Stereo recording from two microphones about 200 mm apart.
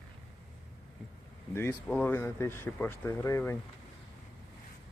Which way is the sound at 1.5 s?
10° left (ahead or behind).